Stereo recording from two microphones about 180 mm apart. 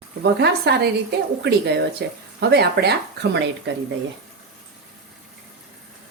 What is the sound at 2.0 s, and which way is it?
Speech, 70° right (ahead or behind).